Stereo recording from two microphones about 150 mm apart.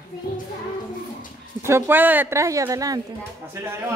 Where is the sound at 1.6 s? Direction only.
15° right (ahead or behind).